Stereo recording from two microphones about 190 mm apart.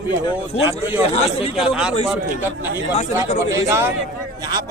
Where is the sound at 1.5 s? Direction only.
5° right (ahead or behind).